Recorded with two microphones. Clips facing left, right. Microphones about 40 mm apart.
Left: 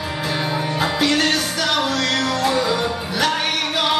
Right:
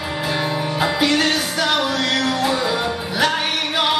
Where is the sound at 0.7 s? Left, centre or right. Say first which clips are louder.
Right 1 dB; centre.